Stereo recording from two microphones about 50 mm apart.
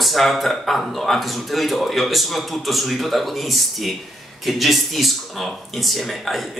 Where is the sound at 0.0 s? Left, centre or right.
Centre.